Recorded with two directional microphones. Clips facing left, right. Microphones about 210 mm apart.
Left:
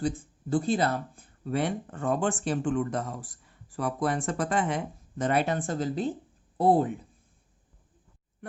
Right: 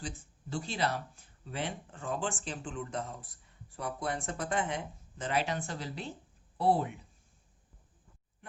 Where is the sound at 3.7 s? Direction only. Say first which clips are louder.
Left 8 dB; 90° left; by 6.9 s 45° left (ahead or behind).